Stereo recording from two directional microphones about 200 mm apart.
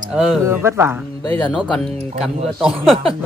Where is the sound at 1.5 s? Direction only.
5° left (ahead or behind).